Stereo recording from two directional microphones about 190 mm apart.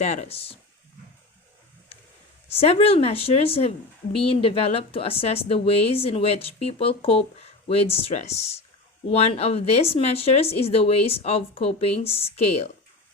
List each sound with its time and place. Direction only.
0.0 s a woman's voice: 40° left (ahead or behind)
2.5 s a woman's voice: 30° left (ahead or behind)